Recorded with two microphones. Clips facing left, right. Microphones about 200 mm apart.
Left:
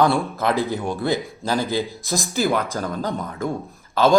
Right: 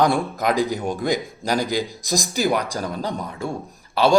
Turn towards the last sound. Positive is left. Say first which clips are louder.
# even
turn(degrees=-10)  # may be behind; listen again after turning